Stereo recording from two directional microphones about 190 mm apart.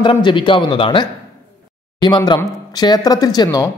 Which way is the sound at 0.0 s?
25° left (ahead or behind).